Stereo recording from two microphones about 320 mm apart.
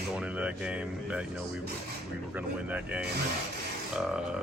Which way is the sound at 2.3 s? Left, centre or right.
Centre.